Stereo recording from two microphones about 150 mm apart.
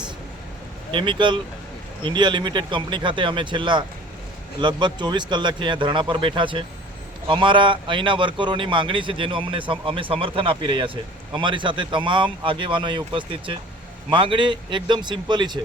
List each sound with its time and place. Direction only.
0.9 s speech: 30° right (ahead or behind)